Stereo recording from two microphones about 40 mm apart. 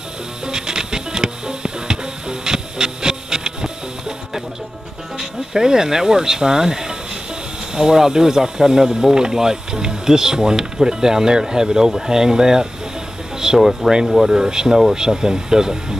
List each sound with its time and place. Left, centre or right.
0.5 s music: centre
5.2 s speech: centre